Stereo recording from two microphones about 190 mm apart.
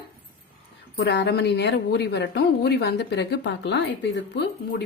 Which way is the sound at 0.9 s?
60° left (ahead or behind).